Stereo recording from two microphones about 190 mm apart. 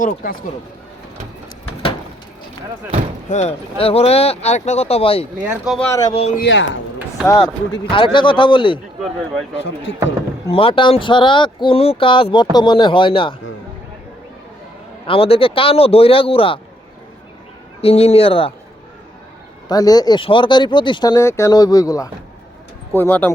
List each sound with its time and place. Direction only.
0.0 s speech: 45° left (ahead or behind)
3.2 s speech: 35° left (ahead or behind)
5.4 s speech: 5° right (ahead or behind)
5.8 s speech: 20° left (ahead or behind)
6.1 s speech: 35° left (ahead or behind)
6.4 s speech: 85° left
7.3 s speech: 20° left (ahead or behind)
9.0 s speech: centre (ahead or behind)
10.5 s speech: 30° left (ahead or behind)
15.0 s speech: 30° left (ahead or behind)
17.7 s speech: 30° left (ahead or behind)
19.6 s speech: 20° left (ahead or behind)